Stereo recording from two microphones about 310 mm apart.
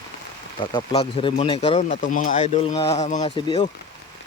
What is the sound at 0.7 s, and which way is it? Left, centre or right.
Speech, centre.